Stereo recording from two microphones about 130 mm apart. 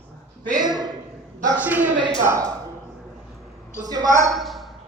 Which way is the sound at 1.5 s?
10° right (ahead or behind).